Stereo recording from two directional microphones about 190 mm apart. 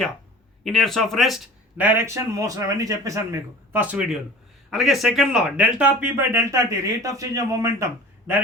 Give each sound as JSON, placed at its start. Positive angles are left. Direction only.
{"t": 0.6, "sound": "speech", "side_deg": 0}
{"t": 1.8, "sound": "speech", "side_deg": -10}
{"t": 3.7, "sound": "speech", "side_deg": -5}